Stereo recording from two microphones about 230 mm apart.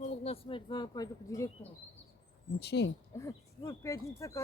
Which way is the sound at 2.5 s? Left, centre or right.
Left.